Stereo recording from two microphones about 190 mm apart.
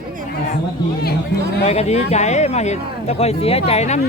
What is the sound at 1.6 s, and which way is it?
Speech, 35° left (ahead or behind).